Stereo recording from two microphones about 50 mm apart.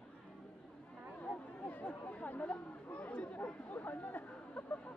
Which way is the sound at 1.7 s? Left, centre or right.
Left.